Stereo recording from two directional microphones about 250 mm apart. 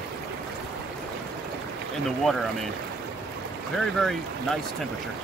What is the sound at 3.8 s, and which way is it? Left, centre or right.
Speech, centre.